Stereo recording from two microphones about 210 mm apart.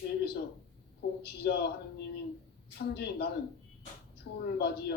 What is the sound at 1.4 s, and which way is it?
Speech, 50° left (ahead or behind).